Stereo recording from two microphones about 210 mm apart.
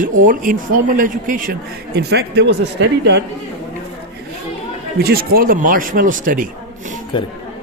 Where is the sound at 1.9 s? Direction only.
50° right (ahead or behind).